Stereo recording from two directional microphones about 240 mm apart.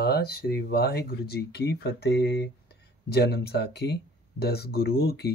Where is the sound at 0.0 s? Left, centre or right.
Left.